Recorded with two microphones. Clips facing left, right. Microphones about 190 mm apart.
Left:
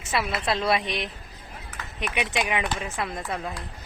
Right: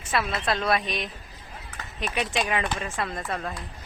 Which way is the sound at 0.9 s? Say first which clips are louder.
Left 1 dB; 25° left (ahead or behind).